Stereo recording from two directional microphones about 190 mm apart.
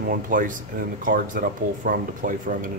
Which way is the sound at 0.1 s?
45° right (ahead or behind).